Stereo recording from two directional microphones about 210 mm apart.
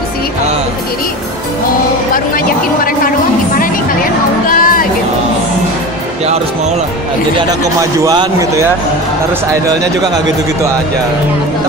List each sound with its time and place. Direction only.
2.1 s speech: 40° left (ahead or behind)
4.5 s music: 40° left (ahead or behind)
8.0 s a man's voice: 15° right (ahead or behind)